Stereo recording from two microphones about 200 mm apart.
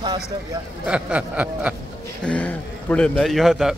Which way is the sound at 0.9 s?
5° right (ahead or behind).